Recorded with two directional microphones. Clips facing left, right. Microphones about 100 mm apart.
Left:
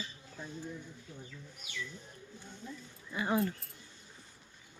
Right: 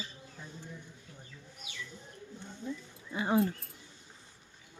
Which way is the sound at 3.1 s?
25° right (ahead or behind).